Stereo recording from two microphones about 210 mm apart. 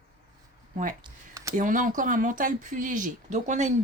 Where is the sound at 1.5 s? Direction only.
40° right (ahead or behind).